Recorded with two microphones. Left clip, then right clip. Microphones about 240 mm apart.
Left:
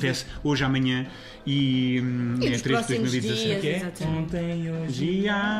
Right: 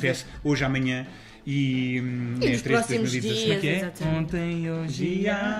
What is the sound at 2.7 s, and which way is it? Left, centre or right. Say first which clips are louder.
Speech: right 1 dB; centre.